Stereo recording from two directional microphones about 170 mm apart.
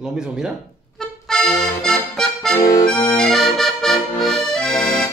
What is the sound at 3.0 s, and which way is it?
Accordion, centre (ahead or behind).